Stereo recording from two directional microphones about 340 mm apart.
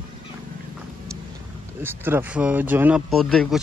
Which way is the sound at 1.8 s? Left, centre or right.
Centre.